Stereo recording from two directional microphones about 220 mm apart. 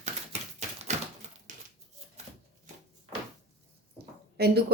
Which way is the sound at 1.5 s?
35° right (ahead or behind).